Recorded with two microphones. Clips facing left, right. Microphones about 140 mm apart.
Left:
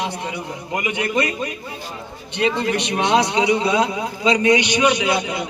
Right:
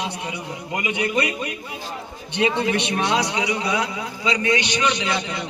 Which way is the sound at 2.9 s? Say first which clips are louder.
Left 4 dB; 20° left (ahead or behind).